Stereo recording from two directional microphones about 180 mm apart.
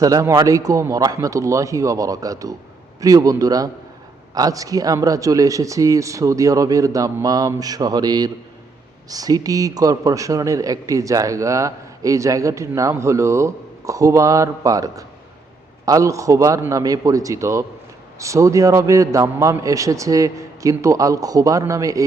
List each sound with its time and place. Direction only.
0.0 s a man's voice: 20° right (ahead or behind)